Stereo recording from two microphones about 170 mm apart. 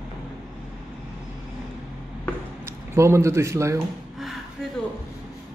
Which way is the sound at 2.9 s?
15° right (ahead or behind).